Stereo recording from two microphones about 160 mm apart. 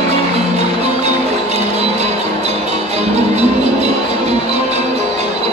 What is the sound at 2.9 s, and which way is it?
Music, 40° right (ahead or behind).